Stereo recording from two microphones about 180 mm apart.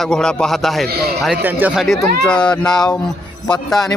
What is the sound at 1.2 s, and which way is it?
A man's voice, 5° right (ahead or behind).